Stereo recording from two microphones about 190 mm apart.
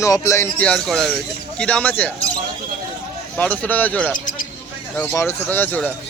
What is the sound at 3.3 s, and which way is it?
A man's voice, 10° left (ahead or behind).